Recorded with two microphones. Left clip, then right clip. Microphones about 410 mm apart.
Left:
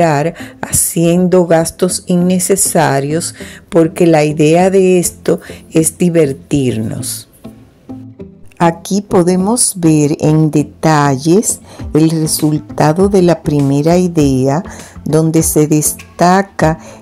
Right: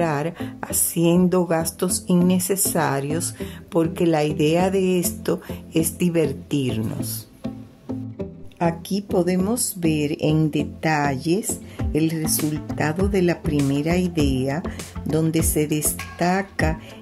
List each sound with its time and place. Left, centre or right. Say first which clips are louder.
0.0 s speech: left 11 dB; right
8.9 s speech: left 10 dB; right
12.4 s speech: left 11 dB; centre
12.7 s speech: left 13 dB; right